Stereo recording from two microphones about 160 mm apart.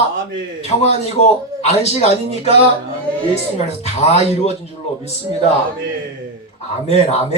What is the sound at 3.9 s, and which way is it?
Speech, 40° left (ahead or behind).